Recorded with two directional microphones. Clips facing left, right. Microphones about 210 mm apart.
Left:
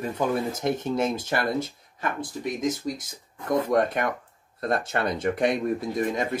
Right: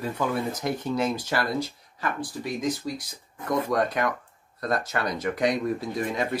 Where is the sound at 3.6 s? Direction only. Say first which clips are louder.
Left 2 dB; 25° left (ahead or behind).